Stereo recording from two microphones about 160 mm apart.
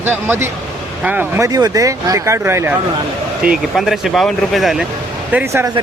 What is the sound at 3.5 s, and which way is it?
Speech, centre (ahead or behind).